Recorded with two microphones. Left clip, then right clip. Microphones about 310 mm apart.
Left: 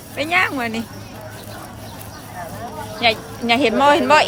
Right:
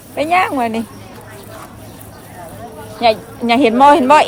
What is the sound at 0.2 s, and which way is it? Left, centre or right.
Speech, centre.